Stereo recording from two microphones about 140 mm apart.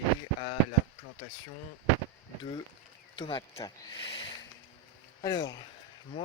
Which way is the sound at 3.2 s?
35° left (ahead or behind).